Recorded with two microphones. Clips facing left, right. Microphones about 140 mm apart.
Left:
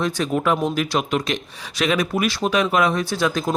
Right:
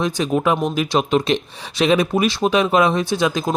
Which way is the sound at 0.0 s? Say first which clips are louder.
Right 2 dB; 20° right (ahead or behind).